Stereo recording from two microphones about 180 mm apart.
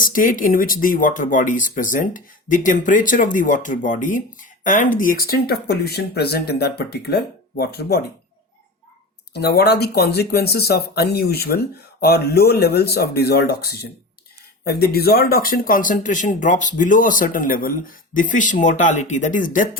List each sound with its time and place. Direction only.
0.0 s speech: 50° left (ahead or behind)
9.3 s speech: 65° left (ahead or behind); by 19.6 s 45° left (ahead or behind)